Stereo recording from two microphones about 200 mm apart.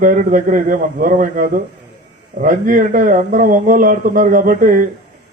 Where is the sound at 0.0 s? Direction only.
40° right (ahead or behind).